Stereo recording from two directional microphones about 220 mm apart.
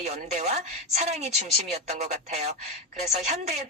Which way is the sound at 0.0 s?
30° right (ahead or behind).